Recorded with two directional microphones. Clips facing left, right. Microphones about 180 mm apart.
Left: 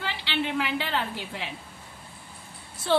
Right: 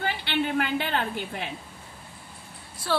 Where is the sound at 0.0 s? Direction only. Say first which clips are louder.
Right 3 dB; 50° right (ahead or behind).